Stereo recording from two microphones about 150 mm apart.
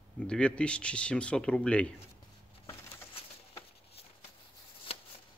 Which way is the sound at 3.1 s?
40° left (ahead or behind).